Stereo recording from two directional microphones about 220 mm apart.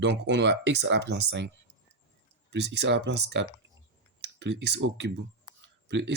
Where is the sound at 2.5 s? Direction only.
50° right (ahead or behind).